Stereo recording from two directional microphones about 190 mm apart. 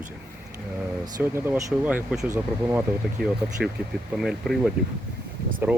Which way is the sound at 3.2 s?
55° right (ahead or behind).